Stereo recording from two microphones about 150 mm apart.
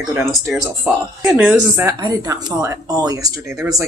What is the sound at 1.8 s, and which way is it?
Speech, 25° right (ahead or behind).